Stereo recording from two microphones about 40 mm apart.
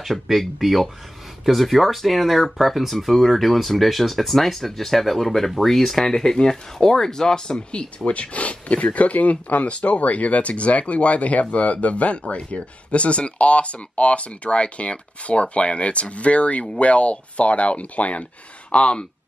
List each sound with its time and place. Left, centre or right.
0.0 s speech: centre
8.0 s speech: left